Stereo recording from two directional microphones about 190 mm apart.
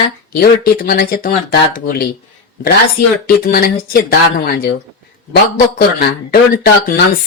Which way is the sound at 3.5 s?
50° left (ahead or behind).